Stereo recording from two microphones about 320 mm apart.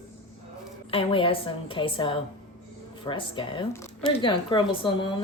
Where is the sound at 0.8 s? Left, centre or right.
Centre.